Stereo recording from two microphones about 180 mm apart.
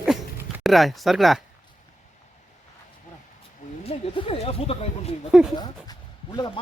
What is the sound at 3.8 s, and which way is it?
Speech, 30° left (ahead or behind).